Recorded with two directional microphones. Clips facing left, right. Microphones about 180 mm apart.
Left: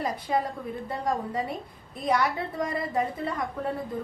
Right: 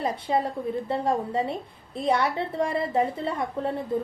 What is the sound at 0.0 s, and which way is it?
A woman's voice, 25° right (ahead or behind).